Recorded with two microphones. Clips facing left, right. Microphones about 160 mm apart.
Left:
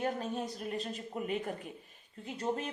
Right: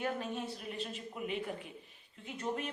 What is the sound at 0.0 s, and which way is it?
Speech, 40° left (ahead or behind).